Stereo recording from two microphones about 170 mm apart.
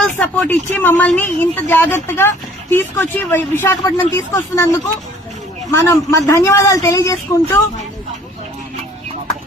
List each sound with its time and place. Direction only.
0.0 s speech: 5° left (ahead or behind)
5.7 s speech: 20° left (ahead or behind)